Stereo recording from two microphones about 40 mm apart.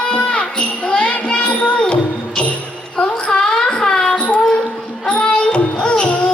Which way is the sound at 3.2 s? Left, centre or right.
Centre.